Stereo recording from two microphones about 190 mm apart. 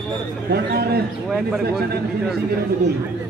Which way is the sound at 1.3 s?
Centre (ahead or behind).